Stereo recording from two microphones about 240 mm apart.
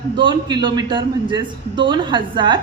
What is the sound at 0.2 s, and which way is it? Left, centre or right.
A man's voice, centre.